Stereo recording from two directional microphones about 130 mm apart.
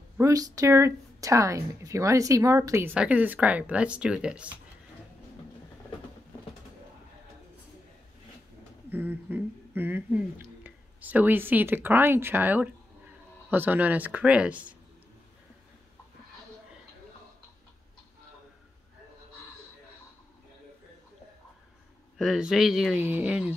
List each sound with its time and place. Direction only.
0.2 s speech: 25° right (ahead or behind)
2.9 s speech: 10° right (ahead or behind)
8.9 s speech: 15° right (ahead or behind)
22.2 s speech: 5° right (ahead or behind)
22.9 s speech: 15° right (ahead or behind)